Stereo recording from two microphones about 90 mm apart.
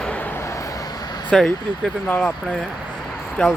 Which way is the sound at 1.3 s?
5° left (ahead or behind).